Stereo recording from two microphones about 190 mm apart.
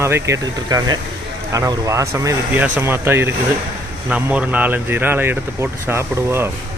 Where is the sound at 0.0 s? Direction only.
15° right (ahead or behind).